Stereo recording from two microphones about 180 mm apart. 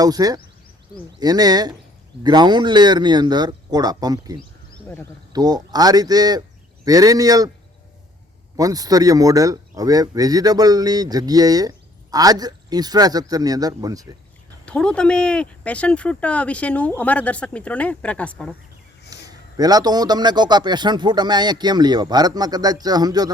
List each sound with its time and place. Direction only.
0.0 s a man's voice: 20° right (ahead or behind)
8.5 s a man's voice: 20° right (ahead or behind)
14.6 s speech: 5° left (ahead or behind)
19.1 s a man's voice: 20° right (ahead or behind)